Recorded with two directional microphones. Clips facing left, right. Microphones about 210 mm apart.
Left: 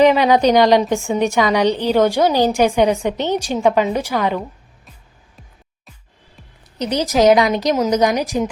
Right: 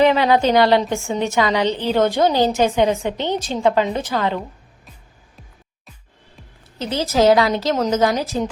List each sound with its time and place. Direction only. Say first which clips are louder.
0.0 s a woman's voice: left 3 dB; 15° left (ahead or behind)
6.7 s a woman's voice: left 2 dB; 15° left (ahead or behind)